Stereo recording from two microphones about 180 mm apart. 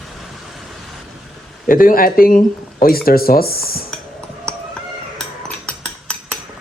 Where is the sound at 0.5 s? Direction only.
Centre (ahead or behind).